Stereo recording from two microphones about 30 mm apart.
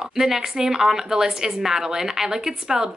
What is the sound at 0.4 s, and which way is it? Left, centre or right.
Speech, centre.